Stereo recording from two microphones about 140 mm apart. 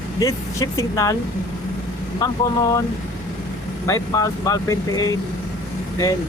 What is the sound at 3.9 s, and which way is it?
Speech, 25° left (ahead or behind).